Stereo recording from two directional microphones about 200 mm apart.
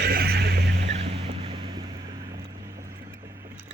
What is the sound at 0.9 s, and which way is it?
Vehicle, 30° right (ahead or behind).